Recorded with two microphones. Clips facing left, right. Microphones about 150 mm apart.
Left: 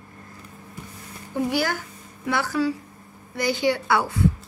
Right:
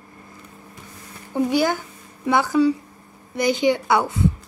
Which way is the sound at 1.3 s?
20° right (ahead or behind).